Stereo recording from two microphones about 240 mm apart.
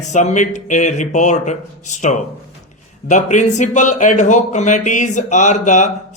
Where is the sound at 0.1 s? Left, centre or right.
Left.